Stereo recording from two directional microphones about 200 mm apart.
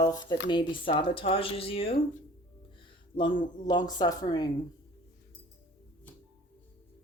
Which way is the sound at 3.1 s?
25° left (ahead or behind).